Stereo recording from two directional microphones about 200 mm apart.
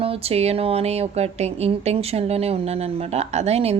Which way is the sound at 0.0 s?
30° right (ahead or behind).